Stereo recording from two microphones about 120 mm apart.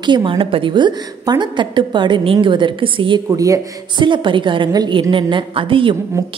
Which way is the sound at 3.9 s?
40° right (ahead or behind).